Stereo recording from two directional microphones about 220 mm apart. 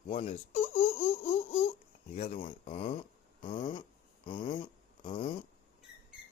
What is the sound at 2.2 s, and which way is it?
Speech, 35° left (ahead or behind).